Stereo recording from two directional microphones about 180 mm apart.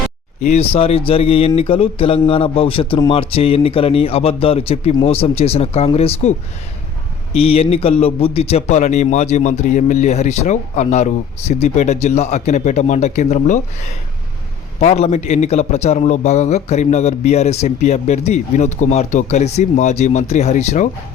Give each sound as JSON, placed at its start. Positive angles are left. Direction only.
{"t": 0.4, "sound": "a man's voice", "side_deg": 35}
{"t": 7.3, "sound": "a man's voice", "side_deg": 35}